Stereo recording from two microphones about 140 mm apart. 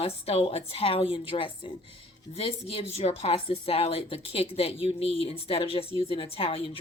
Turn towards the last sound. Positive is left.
turn(degrees=40)  # may be behind; listen again after turning